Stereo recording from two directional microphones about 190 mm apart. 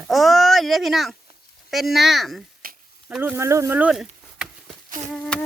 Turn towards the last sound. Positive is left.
turn(degrees=5)  # may be behind; listen again after turning